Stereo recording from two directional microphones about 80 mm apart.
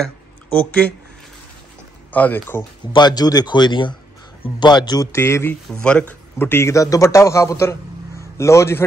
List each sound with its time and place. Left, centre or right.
0.5 s speech: centre
2.1 s speech: left
2.9 s speech: left
5.1 s speech: left
5.7 s speech: centre
6.3 s speech: left
6.7 s a man's voice: left